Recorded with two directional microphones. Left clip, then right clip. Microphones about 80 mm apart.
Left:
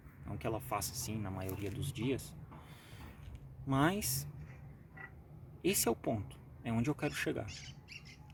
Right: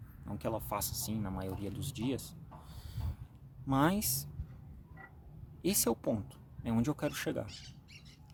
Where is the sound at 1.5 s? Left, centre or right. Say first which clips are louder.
Even; right.